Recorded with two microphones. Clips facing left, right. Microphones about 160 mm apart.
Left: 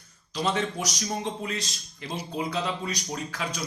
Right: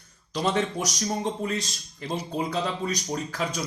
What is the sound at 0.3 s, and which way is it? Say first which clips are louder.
Speech: right 2 dB; 50° right (ahead or behind).